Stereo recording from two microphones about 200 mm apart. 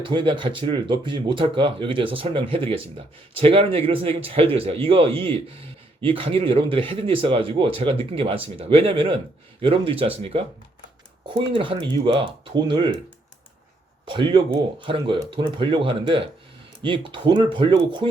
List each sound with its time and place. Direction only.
0.0 s speech: 25° right (ahead or behind)
14.0 s speech: 25° right (ahead or behind)